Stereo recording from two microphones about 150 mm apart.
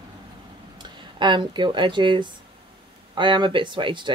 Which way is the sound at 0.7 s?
30° right (ahead or behind).